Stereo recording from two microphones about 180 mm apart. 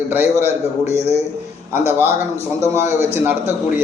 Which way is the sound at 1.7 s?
10° right (ahead or behind).